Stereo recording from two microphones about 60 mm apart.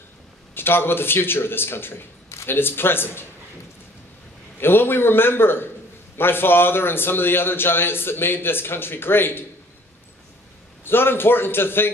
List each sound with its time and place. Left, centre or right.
0.6 s a man's voice: left
2.2 s a sound: left
2.5 s a man's voice: left
4.6 s a man's voice: left
10.8 s a man's voice: left